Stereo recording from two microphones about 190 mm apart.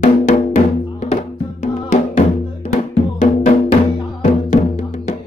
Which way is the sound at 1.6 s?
40° left (ahead or behind).